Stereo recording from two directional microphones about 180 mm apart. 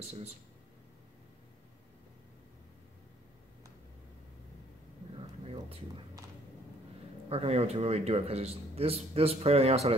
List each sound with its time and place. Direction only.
0.1 s a man's voice: 40° right (ahead or behind)
5.1 s a sound: 30° right (ahead or behind)
7.2 s a man's voice: 35° right (ahead or behind)